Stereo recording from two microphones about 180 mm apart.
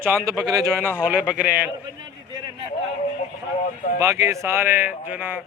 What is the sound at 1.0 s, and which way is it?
Speech, 5° right (ahead or behind).